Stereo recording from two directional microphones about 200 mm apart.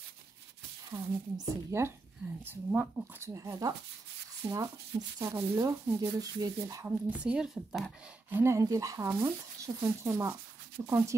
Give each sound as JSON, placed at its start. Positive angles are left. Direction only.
{"t": 0.9, "sound": "speech", "side_deg": -15}
{"t": 8.4, "sound": "speech", "side_deg": -15}